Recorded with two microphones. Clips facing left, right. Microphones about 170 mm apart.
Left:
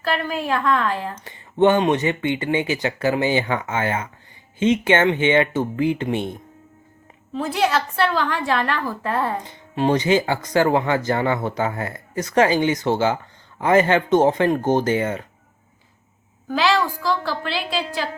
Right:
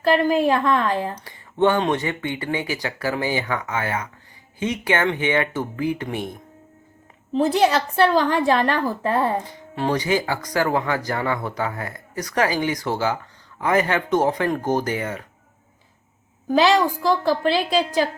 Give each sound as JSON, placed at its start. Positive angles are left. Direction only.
{"t": 0.1, "sound": "a woman's voice", "side_deg": -20}
{"t": 1.2, "sound": "speech", "side_deg": 20}
{"t": 7.3, "sound": "a woman's voice", "side_deg": -20}
{"t": 9.7, "sound": "speech", "side_deg": 20}
{"t": 16.5, "sound": "a woman's voice", "side_deg": -20}